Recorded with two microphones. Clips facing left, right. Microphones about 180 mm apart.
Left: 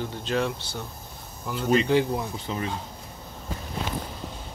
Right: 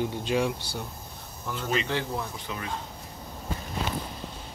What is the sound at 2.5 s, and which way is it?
Speech, 25° left (ahead or behind).